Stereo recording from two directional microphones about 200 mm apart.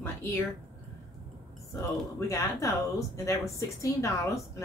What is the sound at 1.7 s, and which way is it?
A woman's voice, 15° left (ahead or behind).